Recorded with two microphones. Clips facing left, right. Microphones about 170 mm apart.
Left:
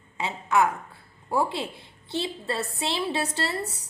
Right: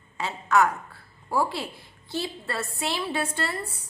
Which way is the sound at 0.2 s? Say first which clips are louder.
Right 1 dB; 20° left (ahead or behind).